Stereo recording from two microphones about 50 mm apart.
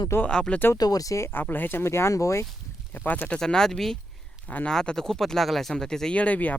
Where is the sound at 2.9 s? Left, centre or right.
Left.